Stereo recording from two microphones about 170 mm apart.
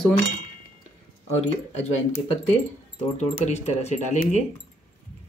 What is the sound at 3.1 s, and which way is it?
Speech, 40° left (ahead or behind).